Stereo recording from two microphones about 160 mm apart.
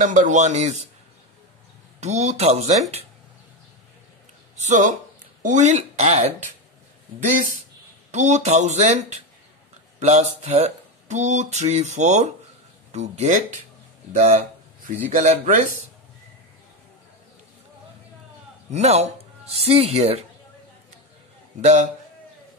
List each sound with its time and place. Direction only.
0.0 s speech: 50° right (ahead or behind)
2.0 s speech: 45° right (ahead or behind)
4.6 s speech: 50° right (ahead or behind)
18.7 s speech: 45° right (ahead or behind)
21.5 s speech: 50° right (ahead or behind)